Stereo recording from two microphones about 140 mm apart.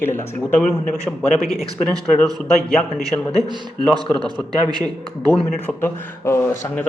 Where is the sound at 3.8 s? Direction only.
30° right (ahead or behind).